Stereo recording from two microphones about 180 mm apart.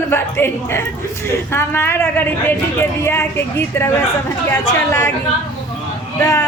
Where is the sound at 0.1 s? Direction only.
15° left (ahead or behind).